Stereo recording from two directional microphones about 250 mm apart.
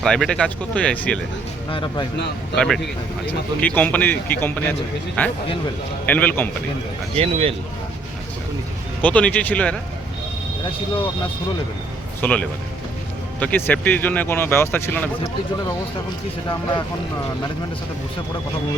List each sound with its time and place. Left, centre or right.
0.0 s speech: centre
1.7 s speech: centre
2.6 s speech: centre
7.1 s speech: right
9.0 s speech: centre
12.2 s speech: centre